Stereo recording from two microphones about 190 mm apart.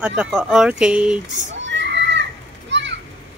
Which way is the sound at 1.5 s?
70° right (ahead or behind).